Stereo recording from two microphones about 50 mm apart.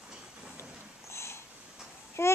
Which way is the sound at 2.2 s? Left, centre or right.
Left.